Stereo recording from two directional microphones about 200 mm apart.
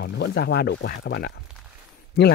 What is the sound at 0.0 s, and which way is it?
Speech, 55° left (ahead or behind).